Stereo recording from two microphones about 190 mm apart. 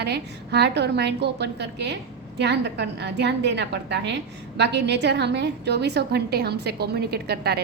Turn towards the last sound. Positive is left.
turn(degrees=-55)  # may be behind; listen again after turning